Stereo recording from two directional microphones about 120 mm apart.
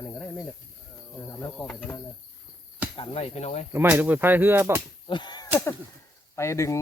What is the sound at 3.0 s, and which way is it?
Speech, 55° left (ahead or behind).